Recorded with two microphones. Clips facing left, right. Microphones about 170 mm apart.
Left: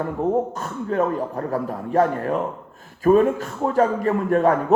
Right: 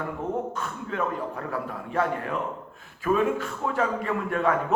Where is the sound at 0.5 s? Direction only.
40° left (ahead or behind).